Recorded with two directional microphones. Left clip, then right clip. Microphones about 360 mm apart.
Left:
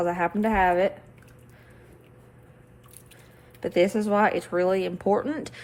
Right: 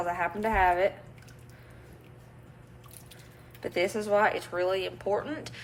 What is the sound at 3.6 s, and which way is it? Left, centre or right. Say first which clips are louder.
Speech: left 6 dB; left.